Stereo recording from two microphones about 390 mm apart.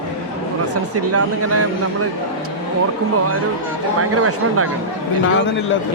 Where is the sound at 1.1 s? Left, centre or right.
Right.